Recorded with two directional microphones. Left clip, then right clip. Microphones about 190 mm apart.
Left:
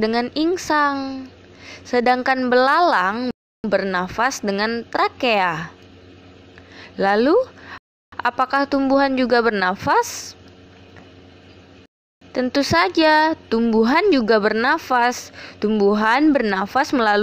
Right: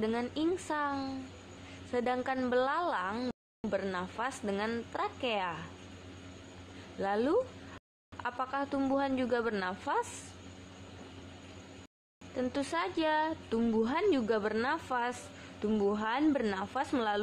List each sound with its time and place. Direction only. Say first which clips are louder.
0.0 s speech: left 13 dB; 40° left (ahead or behind)
7.0 s speech: left 14 dB; 35° left (ahead or behind)
12.4 s speech: left 16 dB; 35° left (ahead or behind)
16.3 s speech: left 13 dB; 25° left (ahead or behind)
16.5 s speech: left 16 dB; 40° left (ahead or behind)